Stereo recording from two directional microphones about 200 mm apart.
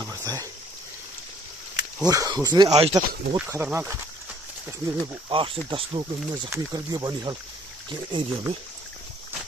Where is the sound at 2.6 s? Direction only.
30° right (ahead or behind).